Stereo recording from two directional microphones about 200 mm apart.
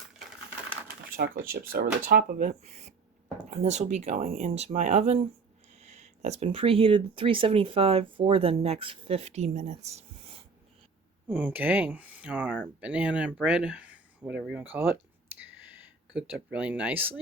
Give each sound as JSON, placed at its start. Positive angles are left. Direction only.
{"t": 1.1, "sound": "speech", "side_deg": -50}
{"t": 11.3, "sound": "speech", "side_deg": -5}
{"t": 15.4, "sound": "a sound", "side_deg": -10}